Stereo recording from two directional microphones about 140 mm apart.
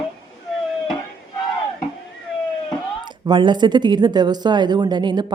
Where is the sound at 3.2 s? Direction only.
30° right (ahead or behind).